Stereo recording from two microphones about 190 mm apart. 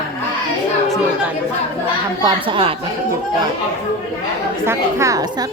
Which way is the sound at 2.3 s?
25° right (ahead or behind).